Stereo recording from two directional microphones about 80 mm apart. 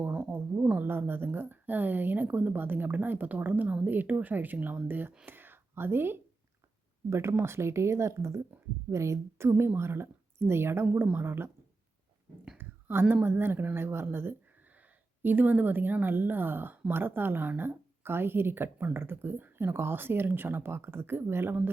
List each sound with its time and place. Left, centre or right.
0.1 s speech: right
12.5 s a woman's voice: right